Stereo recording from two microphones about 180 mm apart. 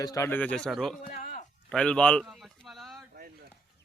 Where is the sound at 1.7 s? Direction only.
5° left (ahead or behind).